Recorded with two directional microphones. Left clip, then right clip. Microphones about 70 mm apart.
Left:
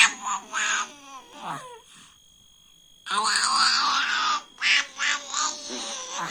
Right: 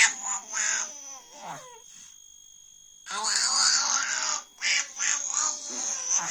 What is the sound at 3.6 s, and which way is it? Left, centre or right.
Quack, right.